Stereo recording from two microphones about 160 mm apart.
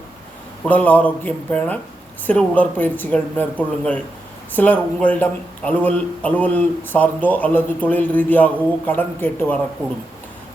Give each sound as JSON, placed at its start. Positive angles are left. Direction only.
{"t": 0.6, "sound": "speech", "side_deg": 10}